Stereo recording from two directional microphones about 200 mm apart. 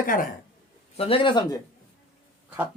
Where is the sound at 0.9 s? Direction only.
30° left (ahead or behind).